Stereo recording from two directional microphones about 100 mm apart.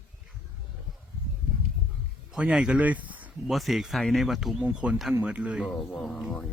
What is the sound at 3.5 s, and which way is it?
Speech, centre (ahead or behind).